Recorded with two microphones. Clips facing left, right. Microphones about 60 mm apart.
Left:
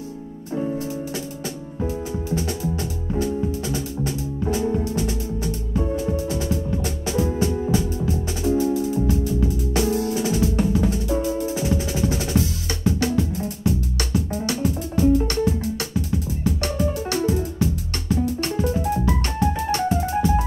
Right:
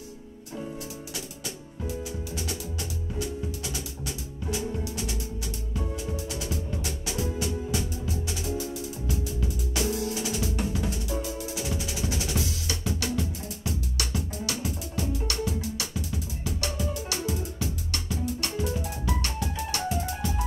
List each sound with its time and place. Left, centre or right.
0.6 s music: left
10.0 s drum: left
16.4 s music: left